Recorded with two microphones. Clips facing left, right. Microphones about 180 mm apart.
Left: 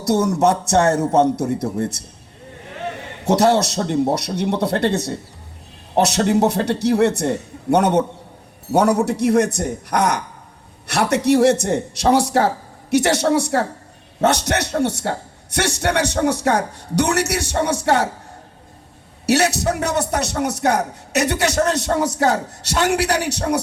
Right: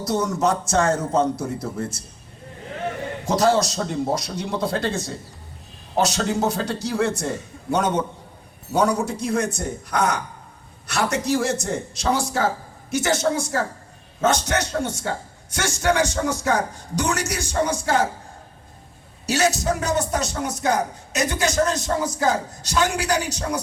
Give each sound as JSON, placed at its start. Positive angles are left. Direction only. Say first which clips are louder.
{"t": 0.0, "sound": "a man's voice", "louder": "left 5 dB", "side_deg": 70}
{"t": 3.2, "sound": "a man's voice", "louder": "left 4 dB", "side_deg": 70}
{"t": 19.2, "sound": "a man's voice", "louder": "left 4 dB", "side_deg": 70}